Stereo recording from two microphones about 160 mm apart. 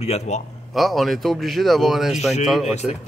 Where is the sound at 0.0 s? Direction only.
40° left (ahead or behind).